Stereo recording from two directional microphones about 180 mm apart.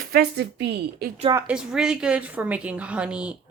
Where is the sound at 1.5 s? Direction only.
5° right (ahead or behind).